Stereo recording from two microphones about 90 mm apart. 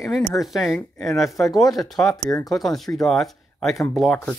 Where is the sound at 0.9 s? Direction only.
35° left (ahead or behind).